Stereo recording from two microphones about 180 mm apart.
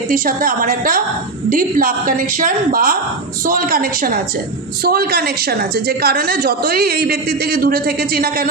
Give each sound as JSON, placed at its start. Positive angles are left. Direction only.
{"t": 0.1, "sound": "a woman's voice", "side_deg": -50}